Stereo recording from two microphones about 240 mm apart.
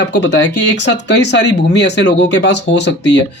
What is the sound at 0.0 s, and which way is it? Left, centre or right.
Speech, left.